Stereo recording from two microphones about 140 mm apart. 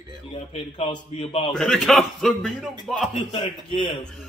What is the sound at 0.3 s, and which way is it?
A man's voice, 45° left (ahead or behind).